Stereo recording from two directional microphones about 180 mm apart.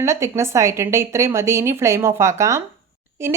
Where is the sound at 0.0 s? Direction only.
15° right (ahead or behind).